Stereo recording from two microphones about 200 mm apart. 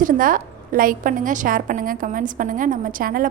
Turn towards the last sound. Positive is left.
turn(degrees=-45)  # may be behind; listen again after turning